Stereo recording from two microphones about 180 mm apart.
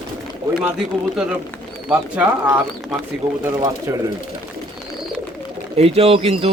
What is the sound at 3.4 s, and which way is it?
Speech, 20° right (ahead or behind).